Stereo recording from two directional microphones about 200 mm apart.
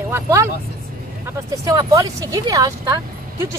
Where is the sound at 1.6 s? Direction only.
20° right (ahead or behind).